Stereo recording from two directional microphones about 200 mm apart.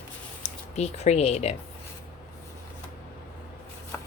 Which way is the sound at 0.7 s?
35° left (ahead or behind).